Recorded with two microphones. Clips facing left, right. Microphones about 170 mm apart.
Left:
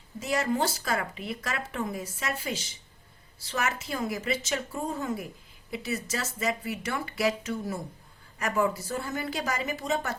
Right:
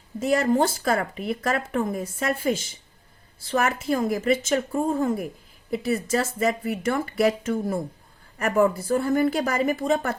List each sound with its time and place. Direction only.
0.2 s a woman's voice: 50° right (ahead or behind)